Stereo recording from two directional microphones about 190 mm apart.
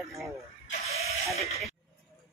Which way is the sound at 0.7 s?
35° left (ahead or behind).